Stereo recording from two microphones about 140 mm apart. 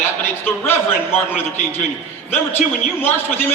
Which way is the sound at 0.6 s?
15° left (ahead or behind).